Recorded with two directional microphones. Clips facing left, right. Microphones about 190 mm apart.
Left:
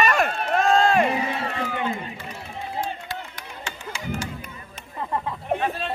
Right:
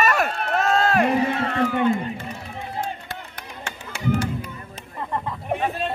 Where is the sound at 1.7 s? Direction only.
50° right (ahead or behind).